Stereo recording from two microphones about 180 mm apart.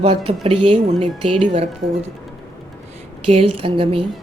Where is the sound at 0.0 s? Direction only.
30° right (ahead or behind).